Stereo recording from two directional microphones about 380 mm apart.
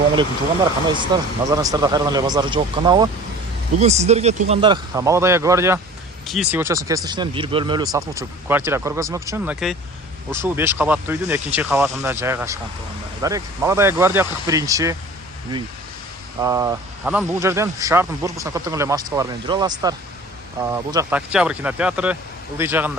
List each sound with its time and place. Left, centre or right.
0.2 s speech: centre
16.4 s speech: centre